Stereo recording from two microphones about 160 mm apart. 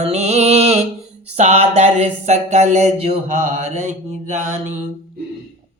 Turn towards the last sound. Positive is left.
turn(degrees=-45)  # may be behind; listen again after turning